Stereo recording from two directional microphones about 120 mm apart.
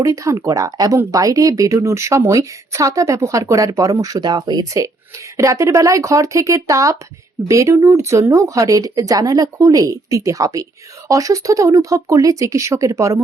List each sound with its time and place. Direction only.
0.0 s speech: 25° right (ahead or behind)